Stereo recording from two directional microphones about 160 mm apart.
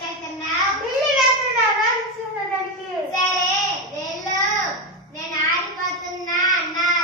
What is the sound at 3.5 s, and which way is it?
Babbling, 25° left (ahead or behind).